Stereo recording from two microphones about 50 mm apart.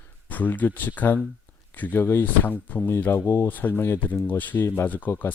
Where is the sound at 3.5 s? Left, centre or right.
Left.